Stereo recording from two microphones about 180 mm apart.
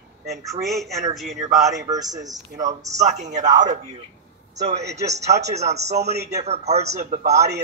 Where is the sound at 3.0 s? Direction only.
40° right (ahead or behind).